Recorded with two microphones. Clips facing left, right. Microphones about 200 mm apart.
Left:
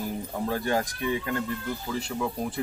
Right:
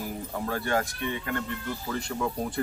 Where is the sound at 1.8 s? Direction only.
5° left (ahead or behind).